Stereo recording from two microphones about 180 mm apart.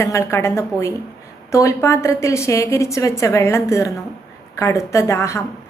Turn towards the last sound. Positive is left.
turn(degrees=15)  # may be behind; listen again after turning